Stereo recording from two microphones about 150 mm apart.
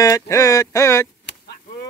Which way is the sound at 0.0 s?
20° left (ahead or behind).